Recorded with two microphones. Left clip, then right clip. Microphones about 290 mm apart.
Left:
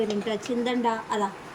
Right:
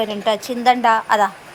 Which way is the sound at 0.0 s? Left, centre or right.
Centre.